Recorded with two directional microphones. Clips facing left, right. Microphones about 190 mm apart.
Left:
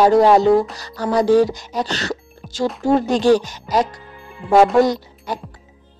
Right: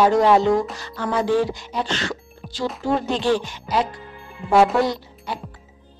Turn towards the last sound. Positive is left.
turn(degrees=40)  # may be behind; listen again after turning